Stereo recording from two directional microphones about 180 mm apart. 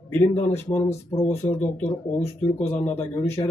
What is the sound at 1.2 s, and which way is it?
Speech, 35° left (ahead or behind).